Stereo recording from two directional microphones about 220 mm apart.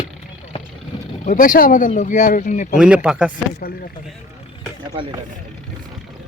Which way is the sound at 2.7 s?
5° right (ahead or behind).